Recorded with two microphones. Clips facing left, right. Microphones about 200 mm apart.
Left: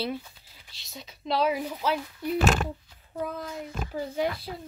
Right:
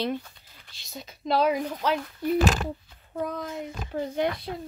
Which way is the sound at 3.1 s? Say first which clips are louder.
Right 2 dB; 5° left (ahead or behind).